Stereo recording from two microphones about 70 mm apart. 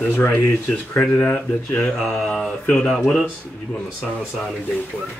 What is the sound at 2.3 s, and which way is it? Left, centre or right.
Speech, centre.